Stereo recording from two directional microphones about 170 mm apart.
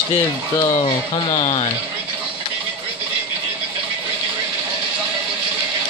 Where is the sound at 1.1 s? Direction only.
30° left (ahead or behind).